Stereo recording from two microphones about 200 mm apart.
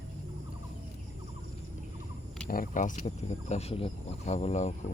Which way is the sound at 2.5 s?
40° left (ahead or behind).